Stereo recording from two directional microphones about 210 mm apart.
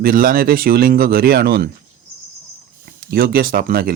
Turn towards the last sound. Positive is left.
turn(degrees=-45)  # may be behind; listen again after turning